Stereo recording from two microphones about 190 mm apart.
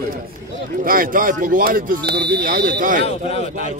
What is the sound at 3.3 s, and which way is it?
Speech, 30° left (ahead or behind).